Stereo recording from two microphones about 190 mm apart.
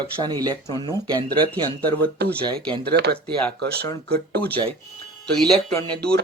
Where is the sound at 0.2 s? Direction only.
20° right (ahead or behind).